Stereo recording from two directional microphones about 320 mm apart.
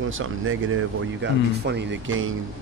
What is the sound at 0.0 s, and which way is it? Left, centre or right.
Speech, right.